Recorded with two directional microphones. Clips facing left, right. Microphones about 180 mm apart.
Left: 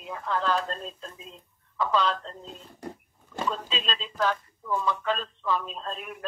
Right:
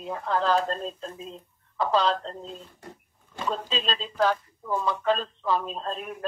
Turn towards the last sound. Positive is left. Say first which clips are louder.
# right 3 dB
turn(degrees=-35)  # may be behind; listen again after turning